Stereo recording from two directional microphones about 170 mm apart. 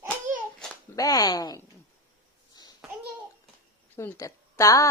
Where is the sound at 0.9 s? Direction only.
20° left (ahead or behind).